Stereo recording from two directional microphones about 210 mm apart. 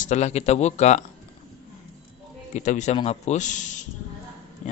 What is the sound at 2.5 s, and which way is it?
Speech, 35° left (ahead or behind).